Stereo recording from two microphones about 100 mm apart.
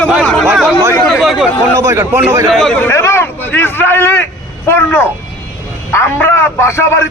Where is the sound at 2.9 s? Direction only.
25° left (ahead or behind).